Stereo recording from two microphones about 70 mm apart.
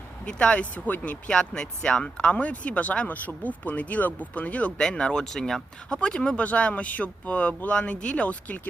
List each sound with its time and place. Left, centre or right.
0.3 s speech: centre
4.8 s speech: centre